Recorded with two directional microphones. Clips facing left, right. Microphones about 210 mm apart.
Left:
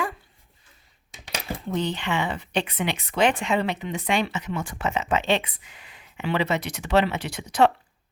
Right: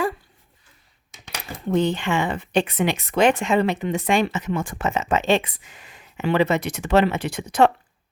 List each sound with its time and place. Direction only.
1.7 s speech: 50° right (ahead or behind)